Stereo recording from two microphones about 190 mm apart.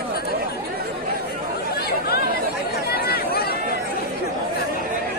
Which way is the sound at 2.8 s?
55° left (ahead or behind).